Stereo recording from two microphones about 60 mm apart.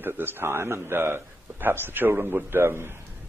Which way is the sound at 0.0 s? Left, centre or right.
Right.